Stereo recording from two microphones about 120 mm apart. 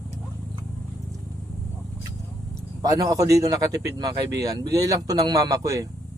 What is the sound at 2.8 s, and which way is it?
Speech, 30° right (ahead or behind).